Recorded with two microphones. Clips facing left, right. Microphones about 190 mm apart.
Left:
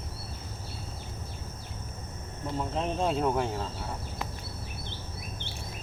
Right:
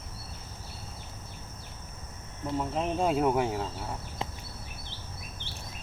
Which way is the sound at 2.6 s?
5° right (ahead or behind).